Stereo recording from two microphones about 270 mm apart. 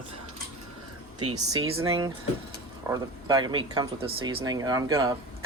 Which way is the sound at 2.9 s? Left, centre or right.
Centre.